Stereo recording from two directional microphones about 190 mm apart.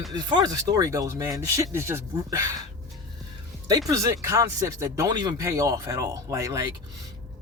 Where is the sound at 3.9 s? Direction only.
15° right (ahead or behind).